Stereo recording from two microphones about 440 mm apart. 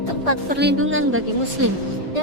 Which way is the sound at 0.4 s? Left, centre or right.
Right.